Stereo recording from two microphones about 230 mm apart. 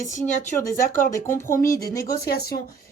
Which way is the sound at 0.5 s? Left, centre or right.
Centre.